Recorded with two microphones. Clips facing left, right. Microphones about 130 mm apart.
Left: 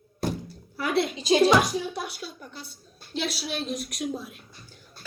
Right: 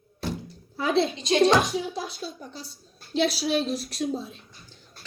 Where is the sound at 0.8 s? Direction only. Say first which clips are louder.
Right 2 dB; 25° right (ahead or behind).